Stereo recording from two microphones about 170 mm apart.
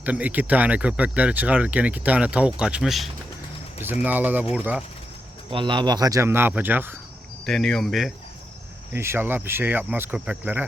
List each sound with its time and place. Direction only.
0.0 s speech: 10° right (ahead or behind)
5.5 s speech: 30° right (ahead or behind); by 6.9 s 10° right (ahead or behind)
7.4 s speech: 5° left (ahead or behind)
8.9 s speech: 15° right (ahead or behind)